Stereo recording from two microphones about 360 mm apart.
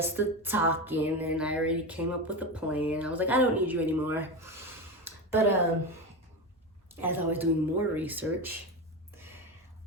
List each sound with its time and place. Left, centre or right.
0.0 s music: centre
7.0 s music: centre